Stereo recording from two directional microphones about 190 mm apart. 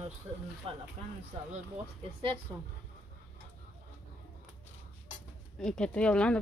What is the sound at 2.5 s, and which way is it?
Speech, 20° right (ahead or behind).